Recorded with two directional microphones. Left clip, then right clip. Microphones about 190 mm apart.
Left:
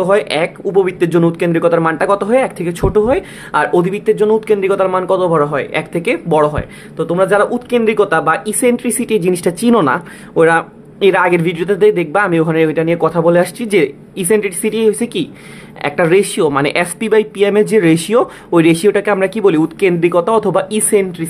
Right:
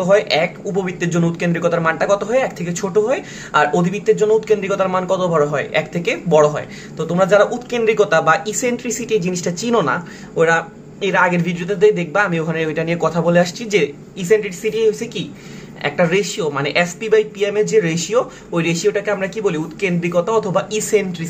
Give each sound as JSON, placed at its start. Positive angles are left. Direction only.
{"t": 0.0, "sound": "speech", "side_deg": 45}